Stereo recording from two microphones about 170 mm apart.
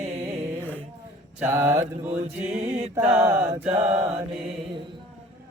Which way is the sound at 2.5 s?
35° right (ahead or behind).